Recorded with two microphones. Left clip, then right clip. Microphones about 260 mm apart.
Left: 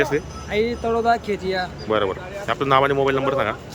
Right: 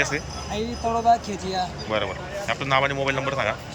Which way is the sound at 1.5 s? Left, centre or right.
Centre.